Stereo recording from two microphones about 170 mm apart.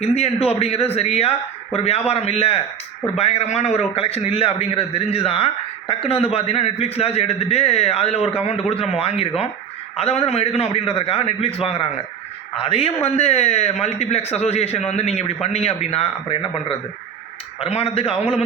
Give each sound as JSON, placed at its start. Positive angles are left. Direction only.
{"t": 0.0, "sound": "a man's voice", "side_deg": 40}